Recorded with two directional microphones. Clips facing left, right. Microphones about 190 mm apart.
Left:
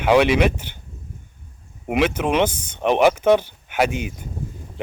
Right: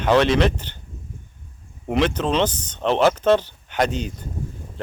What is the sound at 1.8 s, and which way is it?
Speech, 10° left (ahead or behind).